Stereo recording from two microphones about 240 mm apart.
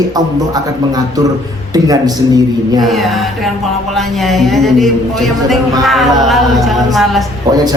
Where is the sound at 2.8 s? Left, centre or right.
Centre.